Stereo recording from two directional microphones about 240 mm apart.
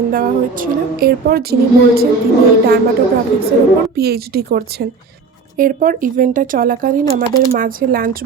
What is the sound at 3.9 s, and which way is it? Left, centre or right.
A woman's voice, right.